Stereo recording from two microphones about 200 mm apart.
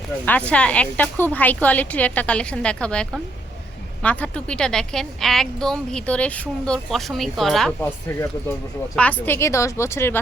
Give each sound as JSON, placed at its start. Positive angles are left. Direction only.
{"t": 0.3, "sound": "a woman's voice", "side_deg": 5}